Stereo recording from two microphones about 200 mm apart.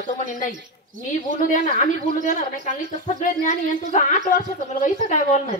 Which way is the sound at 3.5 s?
40° left (ahead or behind).